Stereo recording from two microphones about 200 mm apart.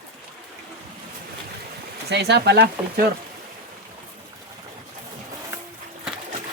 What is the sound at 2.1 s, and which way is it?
Speech, 55° right (ahead or behind).